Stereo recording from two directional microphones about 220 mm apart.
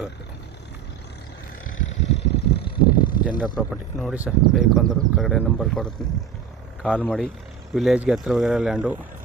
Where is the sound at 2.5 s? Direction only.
45° left (ahead or behind).